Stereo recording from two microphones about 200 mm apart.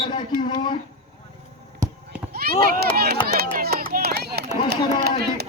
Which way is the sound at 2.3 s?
50° right (ahead or behind).